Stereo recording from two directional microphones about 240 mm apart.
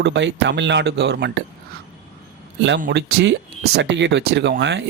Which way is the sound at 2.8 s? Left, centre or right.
Right.